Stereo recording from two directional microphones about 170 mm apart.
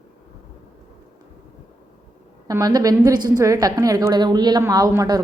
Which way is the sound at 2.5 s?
20° right (ahead or behind).